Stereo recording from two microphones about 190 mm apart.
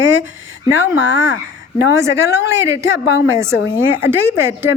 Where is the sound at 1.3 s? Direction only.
65° left (ahead or behind).